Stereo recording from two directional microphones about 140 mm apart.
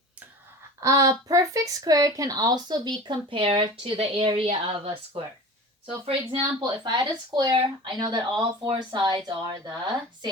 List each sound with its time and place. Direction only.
0.8 s a woman's voice: 25° right (ahead or behind); by 6.4 s 40° right (ahead or behind)
6.6 s speech: 30° right (ahead or behind)